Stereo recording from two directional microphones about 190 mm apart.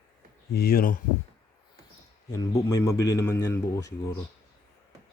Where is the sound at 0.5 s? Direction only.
50° left (ahead or behind).